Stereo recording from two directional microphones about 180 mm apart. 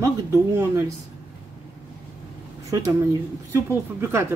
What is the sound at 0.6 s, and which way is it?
Speech, 15° right (ahead or behind).